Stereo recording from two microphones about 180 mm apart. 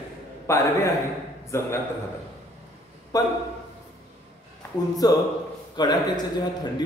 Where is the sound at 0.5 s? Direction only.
15° left (ahead or behind).